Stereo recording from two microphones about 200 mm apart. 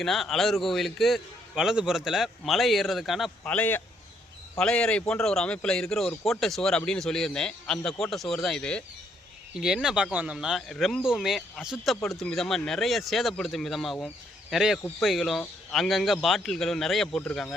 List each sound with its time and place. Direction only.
0.0 s a man's voice: centre (ahead or behind)
14.8 s speech: 10° left (ahead or behind)
15.0 s a man's voice: centre (ahead or behind)